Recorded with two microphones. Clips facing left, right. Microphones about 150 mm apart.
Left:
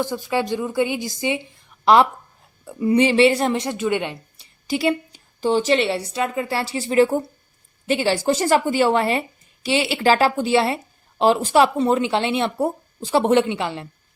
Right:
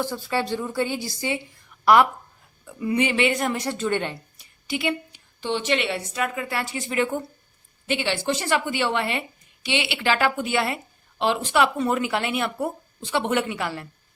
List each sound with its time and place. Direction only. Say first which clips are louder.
0.0 s a woman's voice: left 3 dB; 15° left (ahead or behind)
4.4 s a woman's voice: left 7 dB; 35° left (ahead or behind)